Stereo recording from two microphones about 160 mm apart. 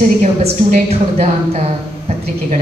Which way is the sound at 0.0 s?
50° right (ahead or behind).